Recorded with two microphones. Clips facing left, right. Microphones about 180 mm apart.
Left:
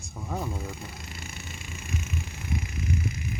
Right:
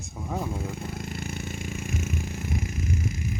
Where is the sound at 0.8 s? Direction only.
50° right (ahead or behind).